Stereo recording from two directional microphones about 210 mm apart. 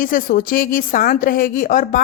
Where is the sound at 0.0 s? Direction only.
40° left (ahead or behind).